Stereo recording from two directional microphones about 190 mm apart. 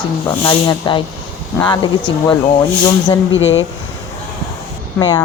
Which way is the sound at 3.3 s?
80° left.